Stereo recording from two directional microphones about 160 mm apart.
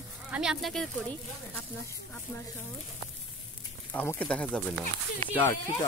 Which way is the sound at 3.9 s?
10° left (ahead or behind).